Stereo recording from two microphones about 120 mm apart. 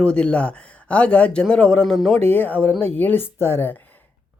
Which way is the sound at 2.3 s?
15° left (ahead or behind).